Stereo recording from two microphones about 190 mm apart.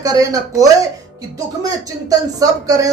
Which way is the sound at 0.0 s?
20° right (ahead or behind).